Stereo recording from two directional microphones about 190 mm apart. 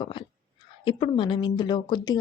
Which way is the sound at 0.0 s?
25° left (ahead or behind).